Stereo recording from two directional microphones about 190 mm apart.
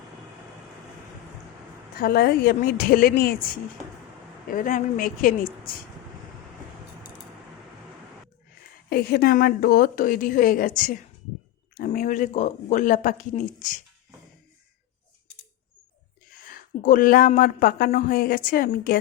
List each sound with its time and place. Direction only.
2.0 s a woman's voice: 55° left (ahead or behind)
8.9 s a woman's voice: 55° left (ahead or behind)
16.3 s speech: 50° left (ahead or behind)